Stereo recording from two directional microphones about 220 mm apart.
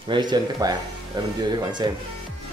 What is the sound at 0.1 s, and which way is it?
Speech, 20° right (ahead or behind).